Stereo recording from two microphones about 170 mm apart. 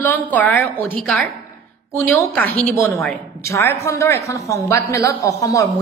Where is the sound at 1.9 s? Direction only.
10° left (ahead or behind).